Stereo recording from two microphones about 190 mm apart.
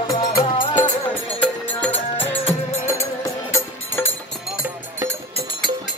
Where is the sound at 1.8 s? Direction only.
10° left (ahead or behind).